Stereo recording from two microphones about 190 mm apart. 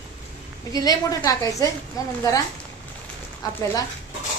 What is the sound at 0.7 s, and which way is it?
A woman's voice, 20° left (ahead or behind).